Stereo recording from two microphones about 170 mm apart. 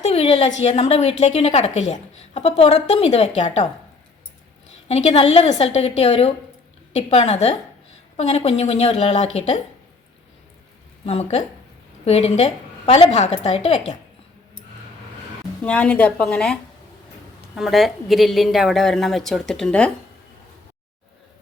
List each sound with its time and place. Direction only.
0.0 s a sound: 40° left (ahead or behind)
0.6 s a woman's voice: 35° left (ahead or behind)
4.9 s a woman's voice: 40° left (ahead or behind)
11.0 s a woman's voice: 40° left (ahead or behind)
15.6 s a woman's voice: 5° left (ahead or behind)